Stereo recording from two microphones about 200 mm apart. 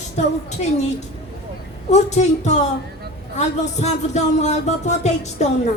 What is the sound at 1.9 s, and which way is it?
Speech, 35° left (ahead or behind).